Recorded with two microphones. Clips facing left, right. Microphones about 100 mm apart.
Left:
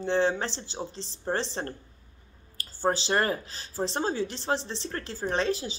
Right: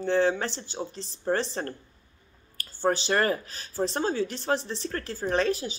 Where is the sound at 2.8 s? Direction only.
30° left (ahead or behind).